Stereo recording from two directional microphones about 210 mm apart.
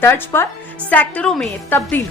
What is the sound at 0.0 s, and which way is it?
A woman's voice, 10° left (ahead or behind).